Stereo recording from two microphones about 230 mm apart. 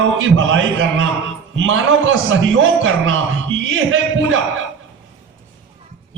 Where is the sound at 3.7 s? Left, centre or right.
Right.